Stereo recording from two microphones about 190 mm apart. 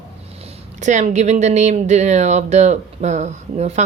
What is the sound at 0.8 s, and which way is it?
Speech, 40° right (ahead or behind).